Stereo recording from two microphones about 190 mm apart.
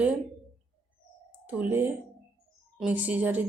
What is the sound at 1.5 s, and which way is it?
Speech, 10° right (ahead or behind).